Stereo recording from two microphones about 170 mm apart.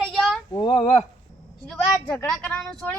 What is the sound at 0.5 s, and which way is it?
Speech, 25° left (ahead or behind).